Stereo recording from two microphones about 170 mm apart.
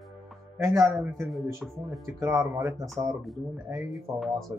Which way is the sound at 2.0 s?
15° right (ahead or behind).